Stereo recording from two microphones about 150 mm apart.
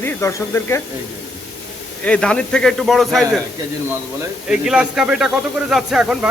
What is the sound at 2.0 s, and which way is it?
Speech, 5° left (ahead or behind).